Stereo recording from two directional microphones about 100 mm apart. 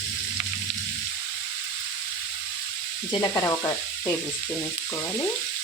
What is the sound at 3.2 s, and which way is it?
Frying, 30° left (ahead or behind).